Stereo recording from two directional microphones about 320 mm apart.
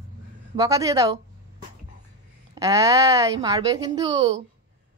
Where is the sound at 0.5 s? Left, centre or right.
Centre.